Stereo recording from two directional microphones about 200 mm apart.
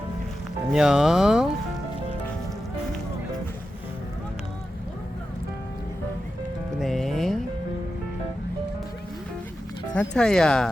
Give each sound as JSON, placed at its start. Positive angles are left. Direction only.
{"t": 0.7, "sound": "speech", "side_deg": -5}
{"t": 6.7, "sound": "music", "side_deg": 0}
{"t": 9.9, "sound": "speech", "side_deg": 5}